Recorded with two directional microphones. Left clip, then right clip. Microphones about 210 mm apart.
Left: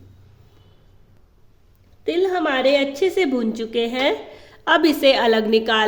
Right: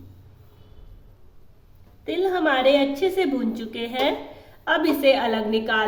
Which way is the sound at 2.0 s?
55° left (ahead or behind).